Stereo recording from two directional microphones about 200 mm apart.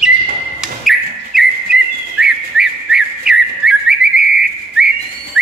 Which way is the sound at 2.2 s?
5° right (ahead or behind).